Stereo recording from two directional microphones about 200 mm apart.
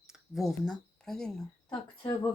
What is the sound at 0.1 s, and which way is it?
Speech, centre (ahead or behind).